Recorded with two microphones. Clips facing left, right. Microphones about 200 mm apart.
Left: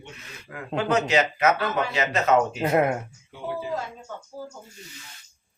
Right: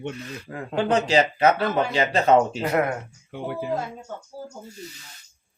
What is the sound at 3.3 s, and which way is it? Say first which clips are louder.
Speech: right 2 dB; 60° right (ahead or behind).